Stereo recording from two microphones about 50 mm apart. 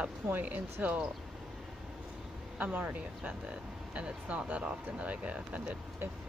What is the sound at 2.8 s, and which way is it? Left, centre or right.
Speech, right.